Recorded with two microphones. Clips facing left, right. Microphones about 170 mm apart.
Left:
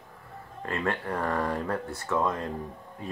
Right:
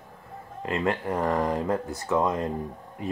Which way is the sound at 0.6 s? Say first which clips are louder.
Right 4 dB; 20° right (ahead or behind).